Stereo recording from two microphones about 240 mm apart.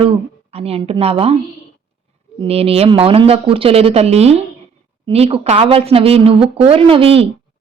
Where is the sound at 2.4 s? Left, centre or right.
Right.